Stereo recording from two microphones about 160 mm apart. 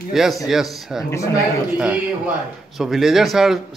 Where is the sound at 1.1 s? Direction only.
20° left (ahead or behind).